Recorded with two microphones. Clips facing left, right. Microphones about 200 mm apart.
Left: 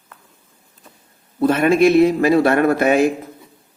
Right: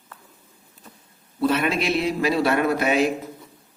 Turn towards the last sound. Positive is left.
turn(degrees=50)  # may be behind; listen again after turning